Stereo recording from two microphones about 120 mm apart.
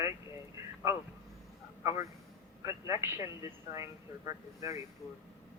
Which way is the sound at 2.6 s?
20° right (ahead or behind).